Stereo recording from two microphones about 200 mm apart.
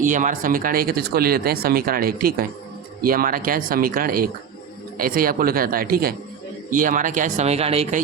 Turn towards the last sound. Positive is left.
turn(degrees=-30)  # may be behind; listen again after turning